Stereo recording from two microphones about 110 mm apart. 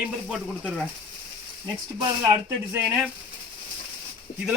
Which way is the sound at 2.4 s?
25° right (ahead or behind).